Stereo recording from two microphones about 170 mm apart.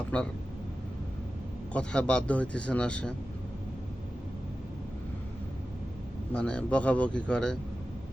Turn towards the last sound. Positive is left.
turn(degrees=5)  # may be behind; listen again after turning